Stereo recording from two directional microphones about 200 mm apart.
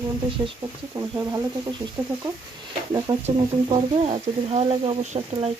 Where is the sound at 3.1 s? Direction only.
20° right (ahead or behind).